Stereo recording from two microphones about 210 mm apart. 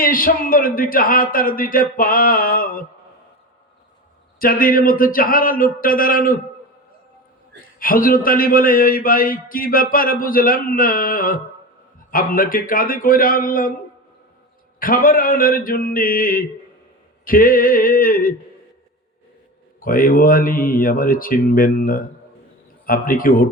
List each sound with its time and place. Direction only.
0.0 s a man's voice: 40° left (ahead or behind)
4.4 s a man's voice: 45° left (ahead or behind)
7.8 s a man's voice: 40° left (ahead or behind)
14.8 s a man's voice: 40° left (ahead or behind)
19.8 s a man's voice: 40° left (ahead or behind)